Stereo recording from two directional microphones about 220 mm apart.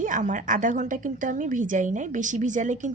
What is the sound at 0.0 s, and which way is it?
A woman's voice, 35° right (ahead or behind).